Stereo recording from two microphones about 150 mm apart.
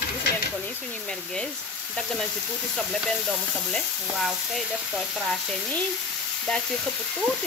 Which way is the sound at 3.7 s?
Centre (ahead or behind).